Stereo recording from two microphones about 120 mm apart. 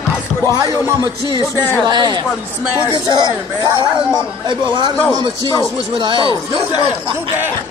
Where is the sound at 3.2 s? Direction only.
25° left (ahead or behind).